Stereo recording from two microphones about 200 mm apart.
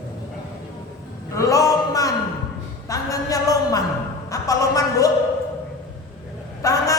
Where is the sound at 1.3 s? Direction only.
15° left (ahead or behind).